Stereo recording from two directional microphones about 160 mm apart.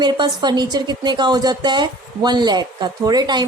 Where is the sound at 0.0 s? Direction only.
25° right (ahead or behind).